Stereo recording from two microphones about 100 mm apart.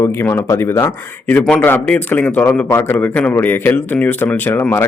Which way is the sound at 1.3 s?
20° left (ahead or behind).